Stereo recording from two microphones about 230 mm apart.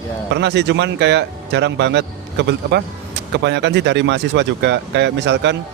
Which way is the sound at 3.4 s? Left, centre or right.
Right.